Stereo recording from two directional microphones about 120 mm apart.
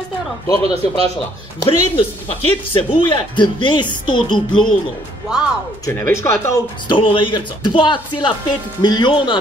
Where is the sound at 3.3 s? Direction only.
40° left (ahead or behind).